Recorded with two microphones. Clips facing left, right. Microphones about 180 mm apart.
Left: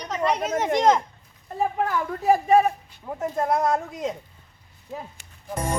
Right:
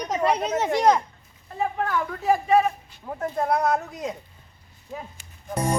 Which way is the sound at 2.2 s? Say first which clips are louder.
Left 3 dB; 40° left (ahead or behind).